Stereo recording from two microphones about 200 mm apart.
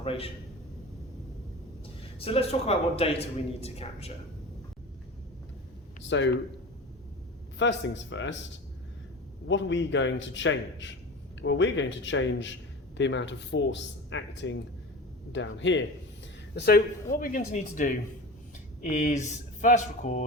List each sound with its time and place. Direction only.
0.0 s a man's voice: 30° left (ahead or behind)
2.1 s a man's voice: 30° left (ahead or behind)
6.1 s speech: 65° left (ahead or behind)
7.6 s speech: 65° left (ahead or behind)
9.5 s speech: 65° left (ahead or behind)
16.6 s a man's voice: 50° left (ahead or behind); by 20.2 s 35° left (ahead or behind)